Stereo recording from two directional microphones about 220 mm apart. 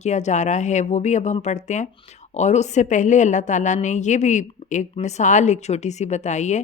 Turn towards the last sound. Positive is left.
turn(degrees=30)  # may be behind; listen again after turning